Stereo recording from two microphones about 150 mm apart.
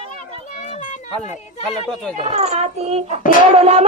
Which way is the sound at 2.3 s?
45° right (ahead or behind).